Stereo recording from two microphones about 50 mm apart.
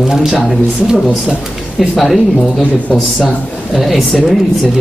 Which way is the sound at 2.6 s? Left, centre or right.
Left.